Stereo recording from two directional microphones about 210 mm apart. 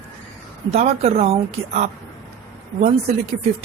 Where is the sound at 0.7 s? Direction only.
30° right (ahead or behind).